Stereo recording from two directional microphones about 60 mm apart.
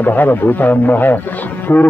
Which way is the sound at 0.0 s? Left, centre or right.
Left.